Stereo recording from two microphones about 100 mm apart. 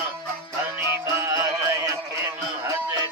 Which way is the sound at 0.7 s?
30° right (ahead or behind).